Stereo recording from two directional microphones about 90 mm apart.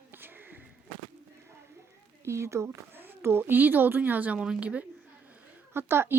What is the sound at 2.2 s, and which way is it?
Speech, 30° right (ahead or behind).